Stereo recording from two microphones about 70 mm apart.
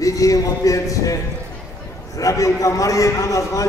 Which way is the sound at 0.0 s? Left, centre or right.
Left.